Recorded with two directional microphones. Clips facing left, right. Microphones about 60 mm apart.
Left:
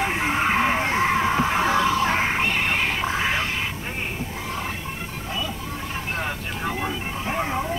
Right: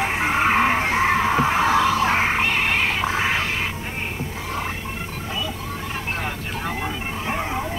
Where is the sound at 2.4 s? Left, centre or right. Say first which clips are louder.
Right 2 dB; right.